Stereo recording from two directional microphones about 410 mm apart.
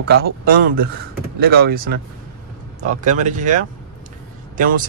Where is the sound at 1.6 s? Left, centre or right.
Right.